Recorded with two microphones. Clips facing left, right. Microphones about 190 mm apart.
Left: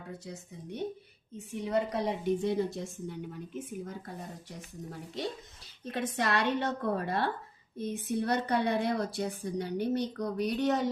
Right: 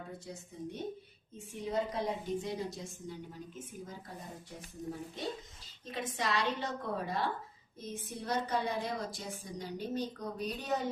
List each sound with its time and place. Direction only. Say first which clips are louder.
0.3 s speech: left 1 dB; 70° left (ahead or behind)
5.8 s a woman's voice: left 5 dB; 65° left (ahead or behind)